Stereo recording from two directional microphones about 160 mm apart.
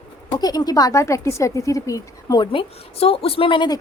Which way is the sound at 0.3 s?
25° left (ahead or behind).